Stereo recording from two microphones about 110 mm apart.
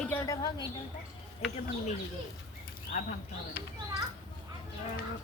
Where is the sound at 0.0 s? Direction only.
15° left (ahead or behind).